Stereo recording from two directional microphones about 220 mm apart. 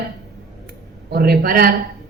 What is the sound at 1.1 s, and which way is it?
Speech, 45° right (ahead or behind).